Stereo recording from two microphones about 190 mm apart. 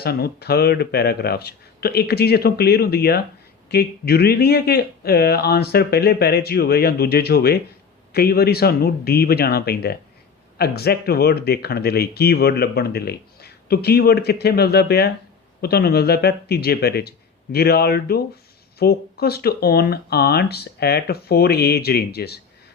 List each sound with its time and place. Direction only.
0.0 s speech: 55° left (ahead or behind)